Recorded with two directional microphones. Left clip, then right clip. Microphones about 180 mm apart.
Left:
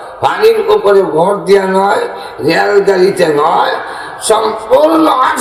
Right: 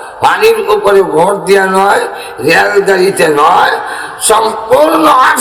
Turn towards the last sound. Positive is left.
turn(degrees=-25)  # may be behind; listen again after turning